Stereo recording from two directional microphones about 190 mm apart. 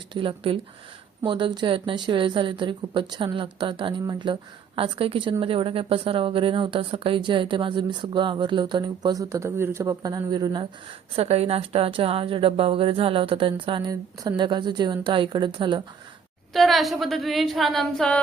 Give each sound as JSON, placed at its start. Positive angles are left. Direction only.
{"t": 0.1, "sound": "a woman's voice", "side_deg": -25}
{"t": 16.5, "sound": "a woman's voice", "side_deg": 0}